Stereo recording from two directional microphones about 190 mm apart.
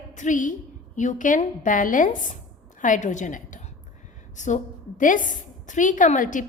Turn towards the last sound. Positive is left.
turn(degrees=45)  # may be behind; listen again after turning